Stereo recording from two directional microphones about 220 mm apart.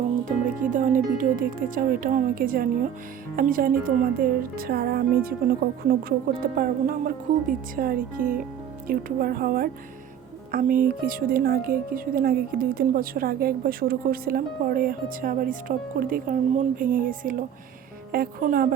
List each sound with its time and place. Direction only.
0.3 s a woman's voice: 35° right (ahead or behind)
6.1 s a woman's voice: 40° right (ahead or behind)